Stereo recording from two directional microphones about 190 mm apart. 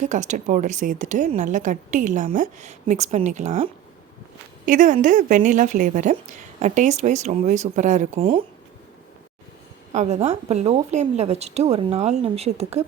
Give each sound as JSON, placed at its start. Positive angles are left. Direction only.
{"t": 0.0, "sound": "a woman's voice", "side_deg": -40}
{"t": 9.9, "sound": "a woman's voice", "side_deg": -35}